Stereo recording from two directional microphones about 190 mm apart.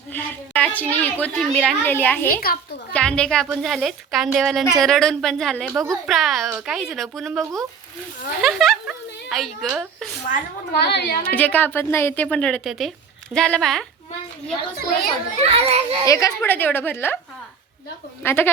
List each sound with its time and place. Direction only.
0.1 s a woman's voice: 10° left (ahead or behind)
2.5 s a child's voice: 50° left (ahead or behind)
2.9 s a woman's voice: 5° left (ahead or behind)
10.2 s a child's voice: 55° left (ahead or behind)
11.3 s a woman's voice: 10° left (ahead or behind)
15.4 s a child's voice: 30° right (ahead or behind)
16.0 s a woman's voice: 15° left (ahead or behind)
18.2 s a woman's voice: 10° left (ahead or behind)